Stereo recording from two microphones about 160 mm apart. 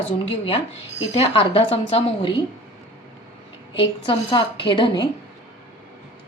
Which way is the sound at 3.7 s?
30° left (ahead or behind).